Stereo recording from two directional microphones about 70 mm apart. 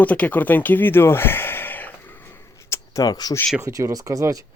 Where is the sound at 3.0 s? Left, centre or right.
Left.